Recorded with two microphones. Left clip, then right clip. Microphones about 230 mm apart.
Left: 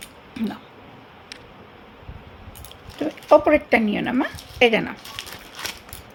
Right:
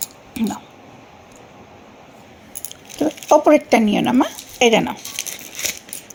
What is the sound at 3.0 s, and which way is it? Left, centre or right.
Speech, right.